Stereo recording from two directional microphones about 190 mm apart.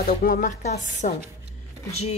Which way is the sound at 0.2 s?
45° left (ahead or behind).